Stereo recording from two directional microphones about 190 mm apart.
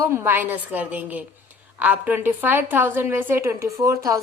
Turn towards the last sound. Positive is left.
turn(degrees=-15)  # may be behind; listen again after turning